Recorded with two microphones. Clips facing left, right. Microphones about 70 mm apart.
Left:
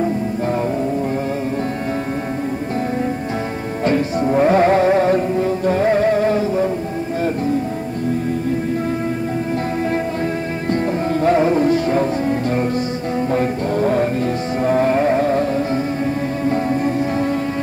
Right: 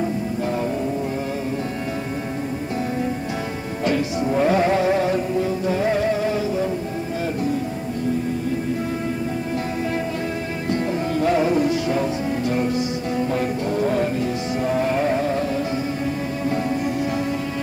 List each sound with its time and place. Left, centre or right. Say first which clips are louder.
3.8 s music: left 4 dB; left
10.7 s music: left 4 dB; left